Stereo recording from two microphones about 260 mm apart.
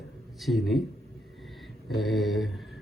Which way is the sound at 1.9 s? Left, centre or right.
Centre.